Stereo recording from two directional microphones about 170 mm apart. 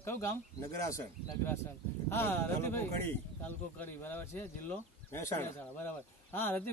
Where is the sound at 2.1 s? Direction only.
15° left (ahead or behind).